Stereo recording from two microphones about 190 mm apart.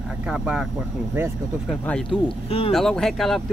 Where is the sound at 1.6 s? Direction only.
5° left (ahead or behind).